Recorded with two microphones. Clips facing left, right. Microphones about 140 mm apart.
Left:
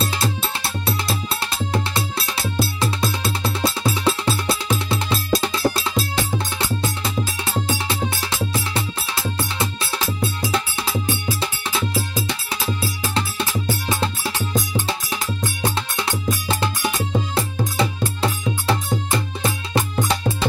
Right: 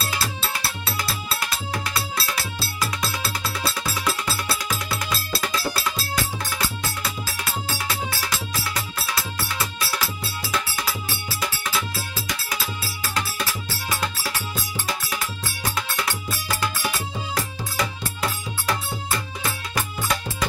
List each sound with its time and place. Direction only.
0.0 s music: 20° left (ahead or behind)